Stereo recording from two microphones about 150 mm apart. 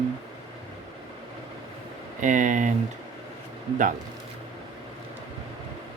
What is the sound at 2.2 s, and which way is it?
Speech, 55° right (ahead or behind).